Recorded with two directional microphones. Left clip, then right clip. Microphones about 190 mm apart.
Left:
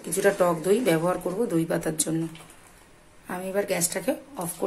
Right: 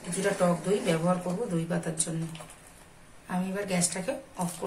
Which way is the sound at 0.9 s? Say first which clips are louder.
Left 4 dB; 50° left (ahead or behind).